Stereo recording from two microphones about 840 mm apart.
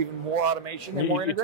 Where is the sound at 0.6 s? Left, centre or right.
Right.